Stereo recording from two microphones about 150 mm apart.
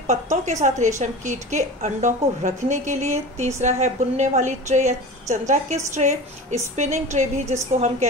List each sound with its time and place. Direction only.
0.0 s a woman's voice: 50° right (ahead or behind)